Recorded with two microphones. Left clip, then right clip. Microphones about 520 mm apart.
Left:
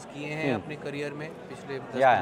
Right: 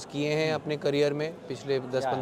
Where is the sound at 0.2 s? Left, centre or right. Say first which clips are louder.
Right 3 dB; right.